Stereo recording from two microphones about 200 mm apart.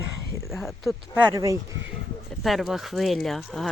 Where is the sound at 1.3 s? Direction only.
15° right (ahead or behind).